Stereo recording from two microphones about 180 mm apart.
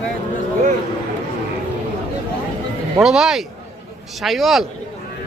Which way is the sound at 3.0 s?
Centre (ahead or behind).